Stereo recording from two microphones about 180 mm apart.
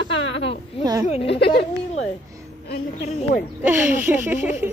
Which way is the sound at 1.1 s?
30° left (ahead or behind).